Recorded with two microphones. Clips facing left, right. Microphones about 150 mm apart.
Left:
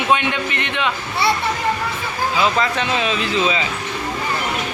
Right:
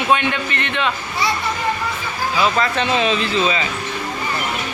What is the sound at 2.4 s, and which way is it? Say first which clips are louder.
Speech: right 1 dB; 20° left (ahead or behind).